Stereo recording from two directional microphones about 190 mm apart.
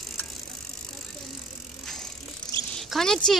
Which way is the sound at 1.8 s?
Centre (ahead or behind).